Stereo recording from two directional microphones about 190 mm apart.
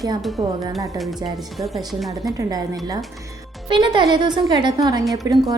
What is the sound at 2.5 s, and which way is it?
A woman's voice, 20° right (ahead or behind).